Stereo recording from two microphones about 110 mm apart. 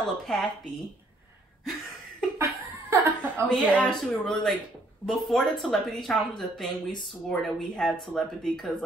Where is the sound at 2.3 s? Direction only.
20° right (ahead or behind).